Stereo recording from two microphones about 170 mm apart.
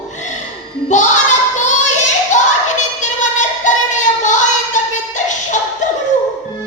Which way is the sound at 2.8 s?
45° left (ahead or behind).